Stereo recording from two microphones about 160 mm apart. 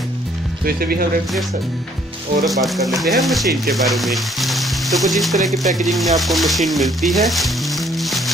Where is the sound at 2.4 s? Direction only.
Centre (ahead or behind).